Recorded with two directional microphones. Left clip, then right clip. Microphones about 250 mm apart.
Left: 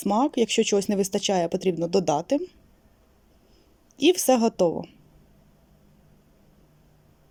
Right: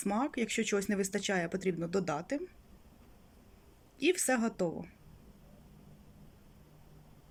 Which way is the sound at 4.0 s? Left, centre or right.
Left.